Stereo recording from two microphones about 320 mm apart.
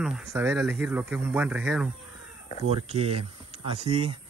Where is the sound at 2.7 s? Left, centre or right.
Centre.